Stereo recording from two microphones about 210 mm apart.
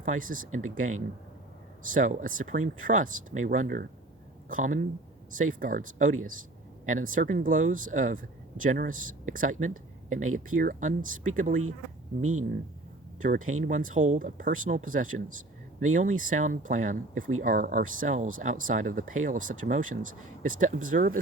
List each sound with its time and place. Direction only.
0.0 s speech: 40° right (ahead or behind)
10.2 s speech: 85° right
10.6 s speech: 40° right (ahead or behind)
12.2 s speech: 80° right
13.7 s speech: 35° right (ahead or behind)